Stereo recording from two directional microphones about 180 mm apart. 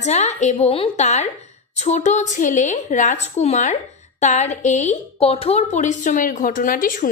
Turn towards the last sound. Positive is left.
turn(degrees=50)  # may be behind; listen again after turning